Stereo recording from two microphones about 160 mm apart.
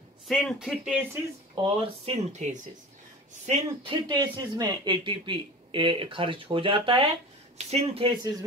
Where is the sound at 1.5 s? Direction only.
35° right (ahead or behind).